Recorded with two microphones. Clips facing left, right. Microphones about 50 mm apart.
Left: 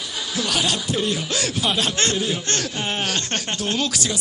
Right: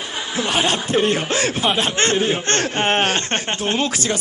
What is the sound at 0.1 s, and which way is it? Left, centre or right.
Speech, right.